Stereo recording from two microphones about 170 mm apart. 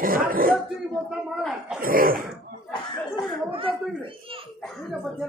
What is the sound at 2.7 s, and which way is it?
Speech, 25° left (ahead or behind).